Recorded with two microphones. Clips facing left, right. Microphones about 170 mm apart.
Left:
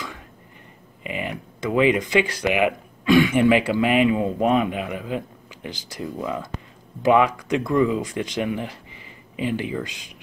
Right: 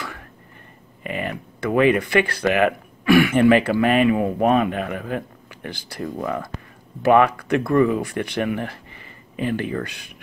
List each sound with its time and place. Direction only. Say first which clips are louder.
1.0 s speech: right 2 dB; 15° left (ahead or behind)